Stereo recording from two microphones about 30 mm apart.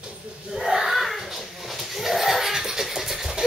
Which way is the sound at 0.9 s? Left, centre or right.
Centre.